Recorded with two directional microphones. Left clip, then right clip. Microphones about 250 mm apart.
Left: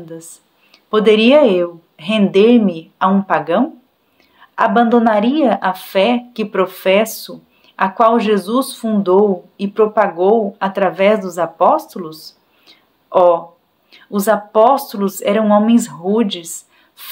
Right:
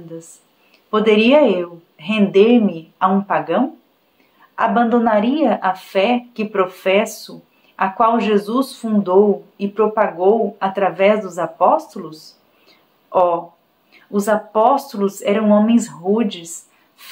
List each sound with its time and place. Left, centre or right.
0.2 s a woman's voice: left